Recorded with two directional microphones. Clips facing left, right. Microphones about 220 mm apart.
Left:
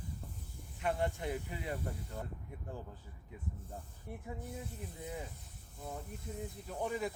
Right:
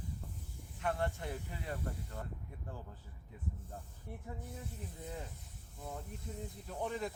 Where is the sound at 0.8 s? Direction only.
15° left (ahead or behind).